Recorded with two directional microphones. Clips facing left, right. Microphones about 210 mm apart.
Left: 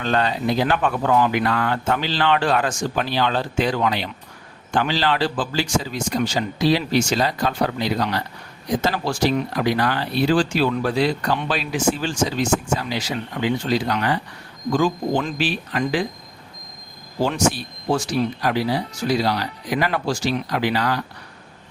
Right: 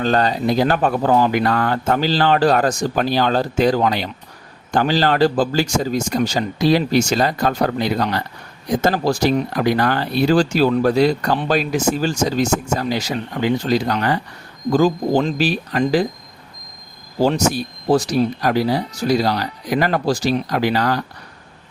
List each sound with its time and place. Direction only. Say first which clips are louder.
0.0 s speech: right 4 dB; 40° right (ahead or behind)
17.2 s speech: right 4 dB; 40° right (ahead or behind)